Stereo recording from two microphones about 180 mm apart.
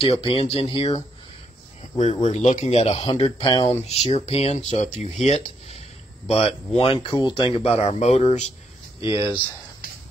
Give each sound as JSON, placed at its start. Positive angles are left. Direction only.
{"t": 0.0, "sound": "speech", "side_deg": 30}
{"t": 1.8, "sound": "a sound", "side_deg": 40}
{"t": 2.2, "sound": "speech", "side_deg": 40}
{"t": 9.1, "sound": "speech", "side_deg": -15}